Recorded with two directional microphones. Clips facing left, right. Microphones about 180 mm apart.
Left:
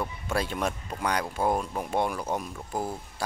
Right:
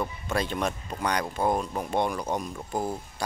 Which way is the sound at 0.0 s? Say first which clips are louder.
Right 1 dB; 5° left (ahead or behind).